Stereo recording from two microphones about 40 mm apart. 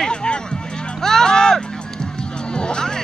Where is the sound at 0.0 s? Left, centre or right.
Left.